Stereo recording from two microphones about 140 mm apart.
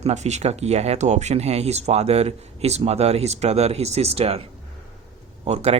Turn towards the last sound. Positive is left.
turn(degrees=-50)  # may be behind; listen again after turning